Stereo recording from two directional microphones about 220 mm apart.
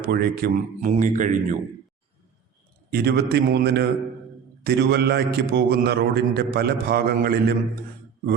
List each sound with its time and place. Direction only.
0.0 s speech: 45° right (ahead or behind)
2.9 s a man's voice: 45° right (ahead or behind)